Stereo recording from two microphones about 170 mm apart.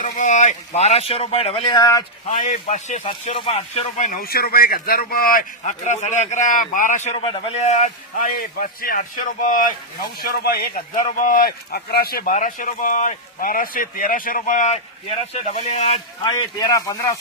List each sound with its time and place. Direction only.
0.0 s speech: 45° left (ahead or behind); by 2.0 s 20° left (ahead or behind)
2.2 s speech: 45° left (ahead or behind)
3.0 s speech: 35° left (ahead or behind)
8.4 s speech: 60° left (ahead or behind)
10.2 s speech: 65° left (ahead or behind)
11.0 s speech: 50° left (ahead or behind)
16.2 s speech: 25° left (ahead or behind)